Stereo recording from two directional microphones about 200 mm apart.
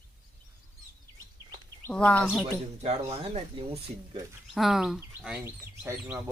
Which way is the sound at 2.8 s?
30° right (ahead or behind).